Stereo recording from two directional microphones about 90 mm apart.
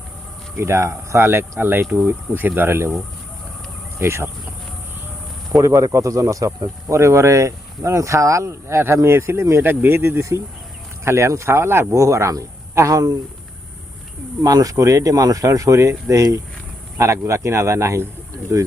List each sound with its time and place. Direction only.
0.5 s speech: 30° right (ahead or behind)
5.5 s speech: 40° right (ahead or behind)
14.4 s speech: 40° right (ahead or behind)